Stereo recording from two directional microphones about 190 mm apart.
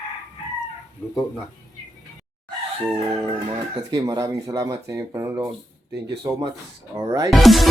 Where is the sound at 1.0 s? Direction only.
10° left (ahead or behind).